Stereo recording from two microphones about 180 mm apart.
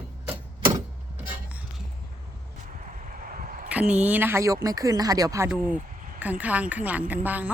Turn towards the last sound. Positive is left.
turn(degrees=-10)  # may be behind; listen again after turning